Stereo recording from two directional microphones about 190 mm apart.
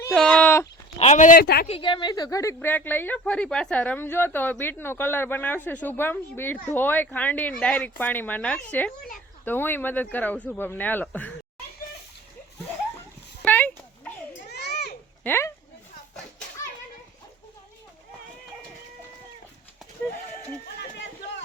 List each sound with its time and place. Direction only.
0.1 s speech: 5° left (ahead or behind)
0.9 s speech: 35° left (ahead or behind); by 1.6 s 55° left (ahead or behind)
1.6 s a woman's voice: 30° left (ahead or behind); by 11.3 s 5° left (ahead or behind)
13.4 s a sound: 10° left (ahead or behind)
14.5 s children playing: 60° left (ahead or behind)
15.2 s speech: 15° left (ahead or behind)